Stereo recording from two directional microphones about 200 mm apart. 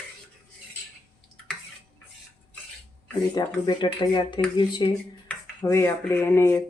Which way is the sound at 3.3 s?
20° left (ahead or behind).